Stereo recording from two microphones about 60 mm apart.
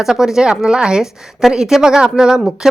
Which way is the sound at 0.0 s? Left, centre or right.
Centre.